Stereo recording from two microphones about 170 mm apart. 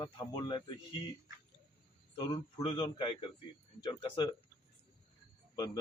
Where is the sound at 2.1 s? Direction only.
25° left (ahead or behind).